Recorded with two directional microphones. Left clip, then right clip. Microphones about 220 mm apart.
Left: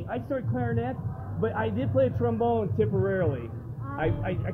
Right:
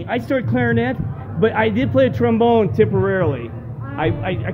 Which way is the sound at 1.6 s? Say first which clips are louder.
Right 8 dB; 30° right (ahead or behind).